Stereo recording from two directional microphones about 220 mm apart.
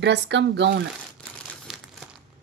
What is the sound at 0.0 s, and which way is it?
Speech, 50° right (ahead or behind).